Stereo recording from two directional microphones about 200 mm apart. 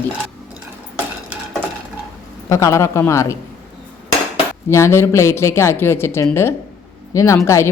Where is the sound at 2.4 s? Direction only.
15° left (ahead or behind).